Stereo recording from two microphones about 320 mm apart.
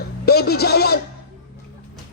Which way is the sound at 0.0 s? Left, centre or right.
Left.